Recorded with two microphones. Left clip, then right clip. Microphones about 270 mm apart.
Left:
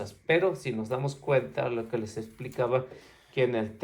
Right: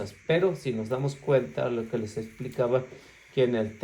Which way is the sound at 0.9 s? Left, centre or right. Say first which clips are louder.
Right 2 dB; left.